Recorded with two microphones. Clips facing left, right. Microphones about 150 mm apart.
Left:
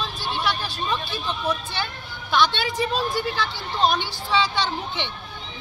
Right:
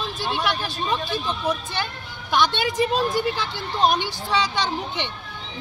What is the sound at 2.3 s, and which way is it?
Speech, 50° right (ahead or behind).